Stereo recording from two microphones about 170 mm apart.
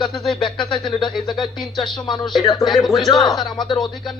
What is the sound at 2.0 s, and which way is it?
Speech, 25° left (ahead or behind).